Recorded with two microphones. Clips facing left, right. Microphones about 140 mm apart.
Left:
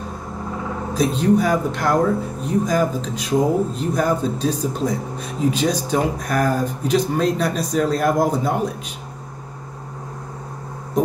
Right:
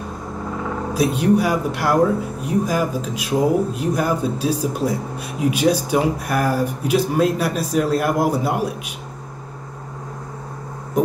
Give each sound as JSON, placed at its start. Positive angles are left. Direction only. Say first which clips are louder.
{"t": 0.9, "sound": "speech", "louder": "even", "side_deg": -10}